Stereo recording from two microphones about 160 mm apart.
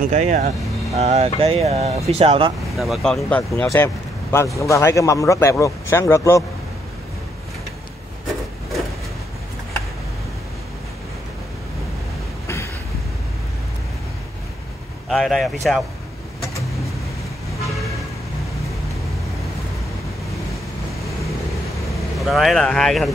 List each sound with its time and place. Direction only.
0.0 s speech: 50° right (ahead or behind)
2.8 s speech: centre (ahead or behind); by 6.4 s 15° left (ahead or behind)
15.0 s speech: centre (ahead or behind)
22.2 s speech: centre (ahead or behind)